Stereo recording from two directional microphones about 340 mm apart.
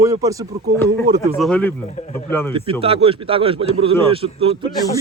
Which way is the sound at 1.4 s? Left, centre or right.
Centre.